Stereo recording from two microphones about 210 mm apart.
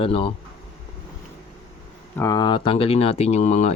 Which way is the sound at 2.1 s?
15° left (ahead or behind).